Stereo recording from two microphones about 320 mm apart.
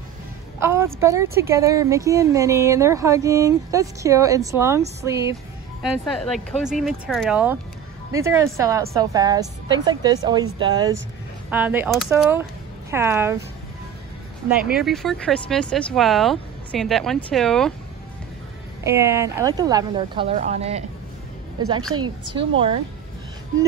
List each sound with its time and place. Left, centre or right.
0.6 s a woman's voice: centre
14.5 s speech: centre
18.9 s a woman's voice: centre
22.3 s a woman's voice: centre